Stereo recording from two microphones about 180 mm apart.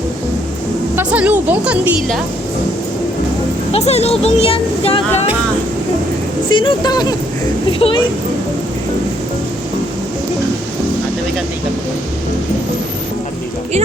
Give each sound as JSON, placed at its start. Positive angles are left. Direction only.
{"t": 0.9, "sound": "speech", "side_deg": -10}
{"t": 3.7, "sound": "speech", "side_deg": 35}
{"t": 6.5, "sound": "speech", "side_deg": 25}